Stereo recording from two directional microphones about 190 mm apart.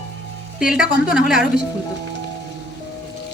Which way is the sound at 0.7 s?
5° right (ahead or behind).